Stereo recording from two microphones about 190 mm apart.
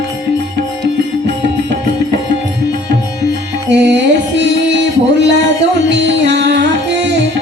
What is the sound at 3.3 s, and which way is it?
Music, 65° right (ahead or behind).